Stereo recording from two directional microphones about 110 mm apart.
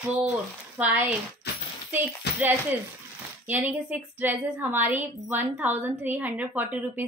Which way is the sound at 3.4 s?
15° right (ahead or behind).